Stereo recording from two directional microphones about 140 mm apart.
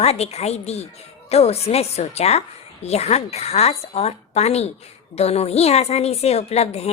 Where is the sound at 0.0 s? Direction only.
50° left (ahead or behind).